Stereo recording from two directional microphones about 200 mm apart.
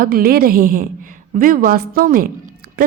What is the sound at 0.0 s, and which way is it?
A woman's voice, 50° right (ahead or behind).